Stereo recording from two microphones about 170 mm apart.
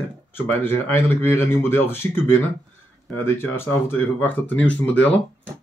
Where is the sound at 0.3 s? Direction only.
10° left (ahead or behind).